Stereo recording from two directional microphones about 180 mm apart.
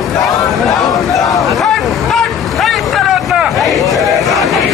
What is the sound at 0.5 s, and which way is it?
Chatter, centre (ahead or behind).